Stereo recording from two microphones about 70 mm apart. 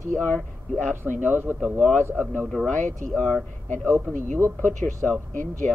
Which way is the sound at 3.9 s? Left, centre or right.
Right.